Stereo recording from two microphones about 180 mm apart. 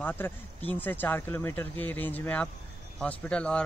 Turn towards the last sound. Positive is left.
turn(degrees=5)  # may be behind; listen again after turning